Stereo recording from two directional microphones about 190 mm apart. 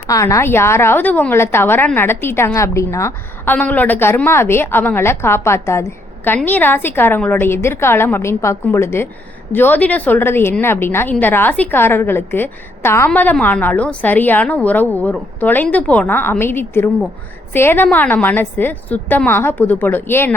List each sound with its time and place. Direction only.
0.1 s a woman's voice: 15° left (ahead or behind)